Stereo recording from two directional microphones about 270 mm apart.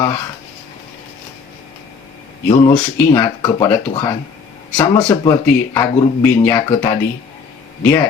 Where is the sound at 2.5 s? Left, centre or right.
Centre.